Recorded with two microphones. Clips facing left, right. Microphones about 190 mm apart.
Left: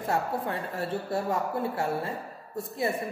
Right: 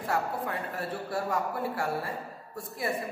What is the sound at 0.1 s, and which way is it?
Speech, 25° left (ahead or behind).